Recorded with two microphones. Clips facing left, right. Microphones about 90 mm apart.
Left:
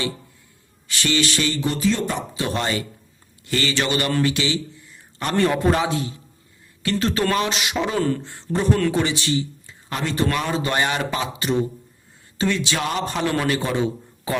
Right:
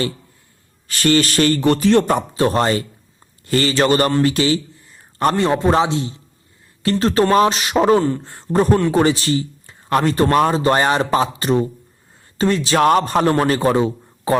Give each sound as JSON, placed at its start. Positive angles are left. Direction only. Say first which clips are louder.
{"t": 0.9, "sound": "speech", "louder": "right 6 dB", "side_deg": -45}
{"t": 4.1, "sound": "a sound", "louder": "right 5 dB", "side_deg": -35}
{"t": 5.4, "sound": "speech", "louder": "right 1 dB", "side_deg": -25}
{"t": 6.8, "sound": "speech", "louder": "right 6 dB", "side_deg": -35}
{"t": 7.9, "sound": "speech", "louder": "right 5 dB", "side_deg": -25}
{"t": 8.2, "sound": "speech", "louder": "right 6 dB", "side_deg": -40}